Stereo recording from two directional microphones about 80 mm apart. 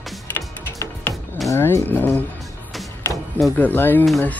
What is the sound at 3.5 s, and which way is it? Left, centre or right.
Speech, left.